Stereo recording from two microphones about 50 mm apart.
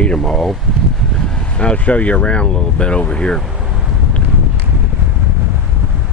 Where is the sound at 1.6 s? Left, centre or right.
Left.